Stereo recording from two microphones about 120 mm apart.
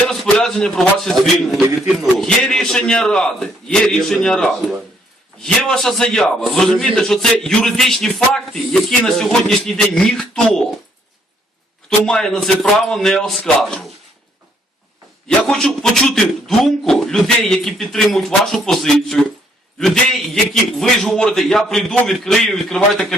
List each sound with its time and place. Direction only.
0.1 s a man's voice: 5° left (ahead or behind)
1.6 s speech: 25° right (ahead or behind)
2.1 s a man's voice: 5° left (ahead or behind)
11.9 s a man's voice: 5° left (ahead or behind)
15.4 s a man's voice: 5° left (ahead or behind)